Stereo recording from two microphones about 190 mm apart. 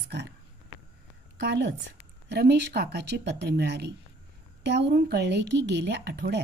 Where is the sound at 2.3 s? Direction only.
55° right (ahead or behind).